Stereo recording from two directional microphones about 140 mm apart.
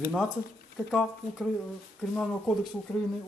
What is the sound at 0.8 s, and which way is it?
A man's voice, centre (ahead or behind).